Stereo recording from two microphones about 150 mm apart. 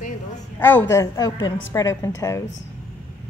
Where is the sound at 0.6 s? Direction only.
15° left (ahead or behind).